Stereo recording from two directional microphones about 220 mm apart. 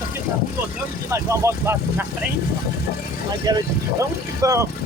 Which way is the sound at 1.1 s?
10° right (ahead or behind).